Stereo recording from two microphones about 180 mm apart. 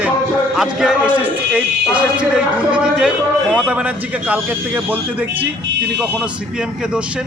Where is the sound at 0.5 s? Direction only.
Centre (ahead or behind).